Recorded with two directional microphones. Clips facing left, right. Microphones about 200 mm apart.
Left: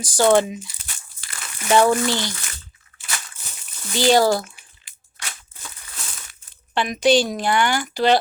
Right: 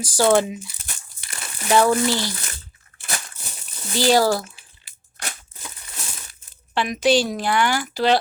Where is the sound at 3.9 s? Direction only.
5° right (ahead or behind).